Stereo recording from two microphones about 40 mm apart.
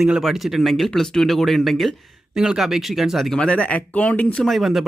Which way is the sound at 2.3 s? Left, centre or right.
Centre.